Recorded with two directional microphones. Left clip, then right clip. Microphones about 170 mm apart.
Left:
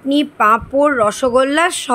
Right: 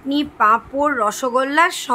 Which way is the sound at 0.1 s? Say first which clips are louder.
Left 3 dB; 25° left (ahead or behind).